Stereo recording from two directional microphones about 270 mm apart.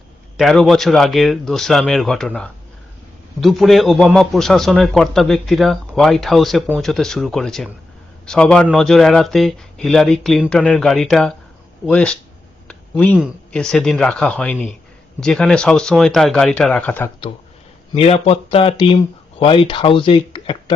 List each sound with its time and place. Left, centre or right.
0.3 s a man's voice: centre
17.9 s speech: left